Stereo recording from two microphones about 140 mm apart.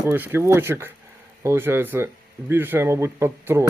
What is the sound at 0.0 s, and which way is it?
Speech, 15° right (ahead or behind).